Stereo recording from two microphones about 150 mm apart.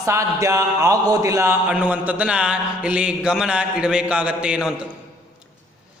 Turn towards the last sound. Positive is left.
turn(degrees=-5)  # may be behind; listen again after turning